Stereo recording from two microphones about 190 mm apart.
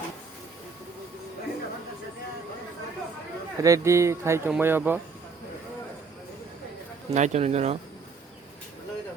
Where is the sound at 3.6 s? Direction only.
15° right (ahead or behind).